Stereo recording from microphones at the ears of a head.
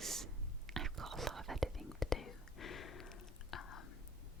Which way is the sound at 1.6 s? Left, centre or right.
Centre.